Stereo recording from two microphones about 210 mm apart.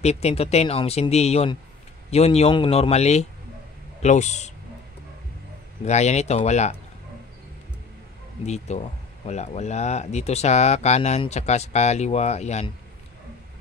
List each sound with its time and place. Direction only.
0.0 s speech: 30° left (ahead or behind)
5.9 s speech: 30° left (ahead or behind)
8.5 s speech: 30° left (ahead or behind)